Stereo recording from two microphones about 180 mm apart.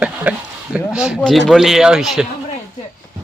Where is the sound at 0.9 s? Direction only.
5° right (ahead or behind).